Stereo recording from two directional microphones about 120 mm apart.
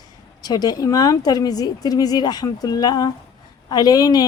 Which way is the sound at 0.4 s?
35° left (ahead or behind).